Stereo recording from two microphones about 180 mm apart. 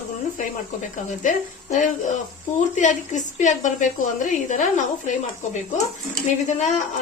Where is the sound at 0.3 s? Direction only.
45° left (ahead or behind).